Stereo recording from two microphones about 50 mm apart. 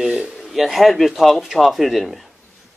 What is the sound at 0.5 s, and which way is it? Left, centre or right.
Speech, centre.